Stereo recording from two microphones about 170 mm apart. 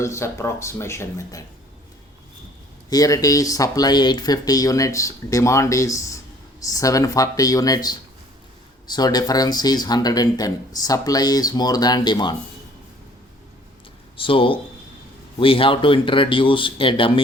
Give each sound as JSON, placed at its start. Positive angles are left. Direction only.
{"t": 0.0, "sound": "speech", "side_deg": 15}
{"t": 2.9, "sound": "speech", "side_deg": 20}
{"t": 14.2, "sound": "speech", "side_deg": 30}